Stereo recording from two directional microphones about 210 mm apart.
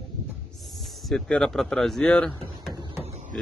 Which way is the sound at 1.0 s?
Centre (ahead or behind).